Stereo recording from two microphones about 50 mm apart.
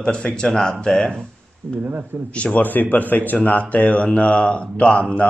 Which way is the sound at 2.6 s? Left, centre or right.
Left.